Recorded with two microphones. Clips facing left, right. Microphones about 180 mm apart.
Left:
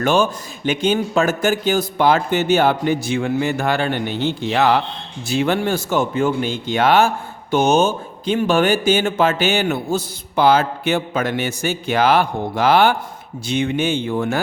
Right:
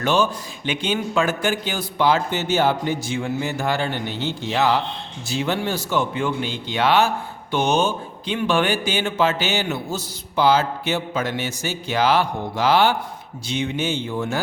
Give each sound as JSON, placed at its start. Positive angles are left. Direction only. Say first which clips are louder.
{"t": 0.0, "sound": "speech", "louder": "left 3 dB", "side_deg": 50}